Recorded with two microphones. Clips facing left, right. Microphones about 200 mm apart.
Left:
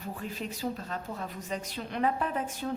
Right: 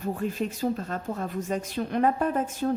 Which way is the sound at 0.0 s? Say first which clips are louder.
Right 8 dB; 45° right (ahead or behind).